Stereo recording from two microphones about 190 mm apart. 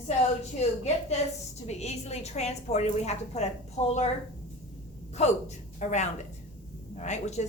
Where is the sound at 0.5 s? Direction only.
35° left (ahead or behind).